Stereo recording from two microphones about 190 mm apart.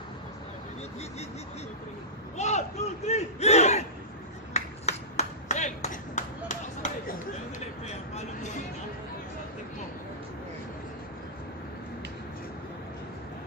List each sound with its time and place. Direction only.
2.3 s a sound: 35° left (ahead or behind)
3.1 s battle cry: 35° left (ahead or behind)
4.6 s clapping: 35° left (ahead or behind)
8.1 s speech: 35° left (ahead or behind)